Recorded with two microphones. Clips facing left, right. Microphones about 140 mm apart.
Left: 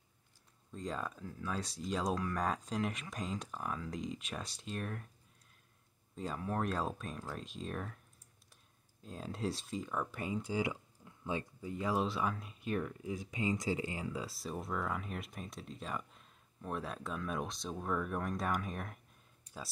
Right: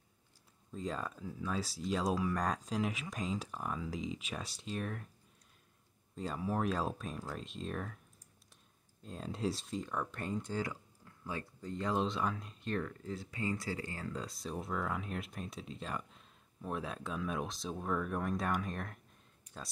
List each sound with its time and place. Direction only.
0.7 s speech: centre (ahead or behind)
6.1 s speech: centre (ahead or behind)
9.0 s speech: centre (ahead or behind)
10.6 s a sound: 20° left (ahead or behind)
11.6 s speech: 5° left (ahead or behind)